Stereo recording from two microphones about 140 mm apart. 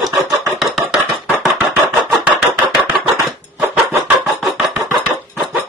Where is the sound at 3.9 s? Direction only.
15° right (ahead or behind).